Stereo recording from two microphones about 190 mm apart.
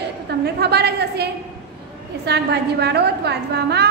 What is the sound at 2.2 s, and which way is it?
A woman's voice, 60° right (ahead or behind).